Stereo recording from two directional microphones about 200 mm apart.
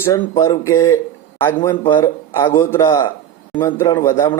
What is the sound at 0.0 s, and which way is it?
A man's voice, 10° left (ahead or behind).